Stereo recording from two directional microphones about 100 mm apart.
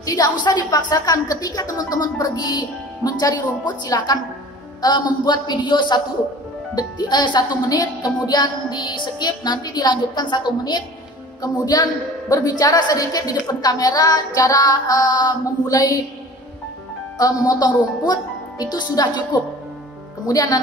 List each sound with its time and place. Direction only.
0.0 s a woman's voice: 40° left (ahead or behind)
17.2 s a woman's voice: 40° left (ahead or behind)
20.2 s a woman's voice: 40° left (ahead or behind)